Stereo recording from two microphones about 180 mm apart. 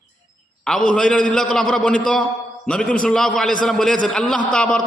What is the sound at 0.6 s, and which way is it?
A man's voice, 5° left (ahead or behind).